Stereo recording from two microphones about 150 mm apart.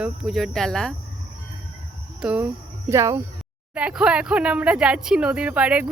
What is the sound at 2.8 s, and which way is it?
Speech, 20° right (ahead or behind).